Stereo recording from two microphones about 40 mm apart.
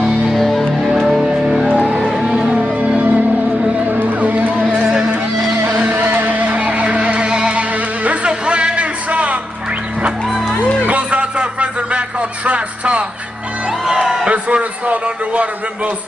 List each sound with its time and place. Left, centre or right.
0.4 s music: centre
0.9 s music: centre
3.0 s music: right
4.7 s music: centre
5.6 s music: right
10.9 s a sound: right
14.2 s a sound: right